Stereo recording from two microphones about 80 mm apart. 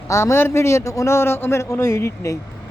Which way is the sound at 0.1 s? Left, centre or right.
Left.